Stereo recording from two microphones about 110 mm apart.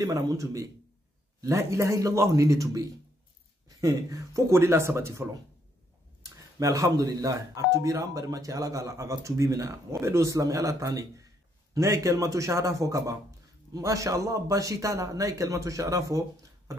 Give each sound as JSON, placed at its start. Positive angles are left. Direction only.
{"t": 0.0, "sound": "speech", "side_deg": -30}